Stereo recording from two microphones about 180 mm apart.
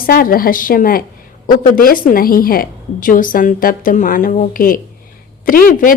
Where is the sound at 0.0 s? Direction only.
55° left (ahead or behind).